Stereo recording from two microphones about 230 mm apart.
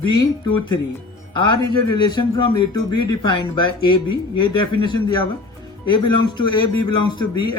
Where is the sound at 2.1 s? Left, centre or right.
Centre.